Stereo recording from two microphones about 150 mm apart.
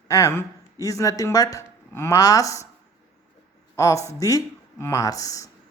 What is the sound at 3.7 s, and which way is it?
Speech, 20° left (ahead or behind).